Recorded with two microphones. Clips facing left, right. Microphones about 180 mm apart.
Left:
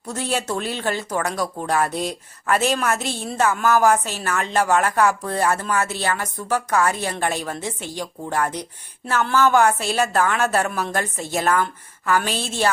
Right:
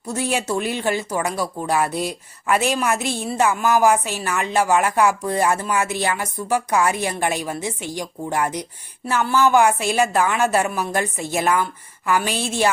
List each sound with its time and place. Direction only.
0.1 s speech: 10° right (ahead or behind)